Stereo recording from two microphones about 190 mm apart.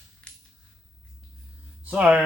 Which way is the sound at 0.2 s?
5° left (ahead or behind).